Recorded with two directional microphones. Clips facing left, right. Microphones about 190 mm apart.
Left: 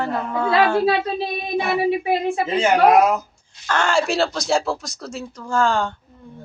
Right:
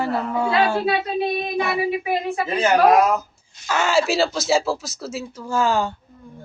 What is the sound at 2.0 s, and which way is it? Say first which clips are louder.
Speech: left 2 dB; 30° left (ahead or behind).